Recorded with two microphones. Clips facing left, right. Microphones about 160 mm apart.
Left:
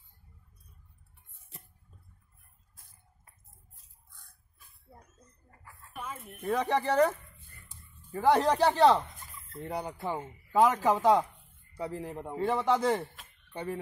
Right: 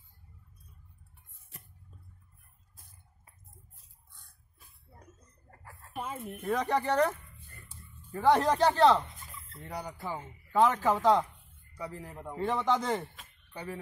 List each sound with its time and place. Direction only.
5.5 s chicken: 40° right (ahead or behind)
6.4 s speech: centre (ahead or behind)
9.6 s a man's voice: 25° left (ahead or behind)
10.1 s a man's voice: 10° left (ahead or behind)
11.7 s a man's voice: 30° left (ahead or behind)
12.4 s speech: 5° left (ahead or behind)